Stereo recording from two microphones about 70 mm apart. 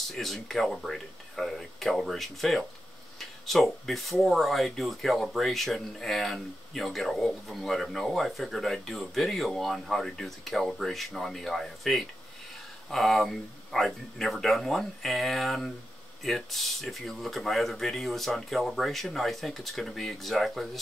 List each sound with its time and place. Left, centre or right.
0.1 s speech: centre